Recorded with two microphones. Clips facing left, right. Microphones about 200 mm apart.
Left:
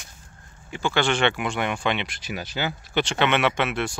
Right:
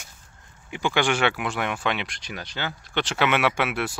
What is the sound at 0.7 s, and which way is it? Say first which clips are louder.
Speech: even; 15° right (ahead or behind).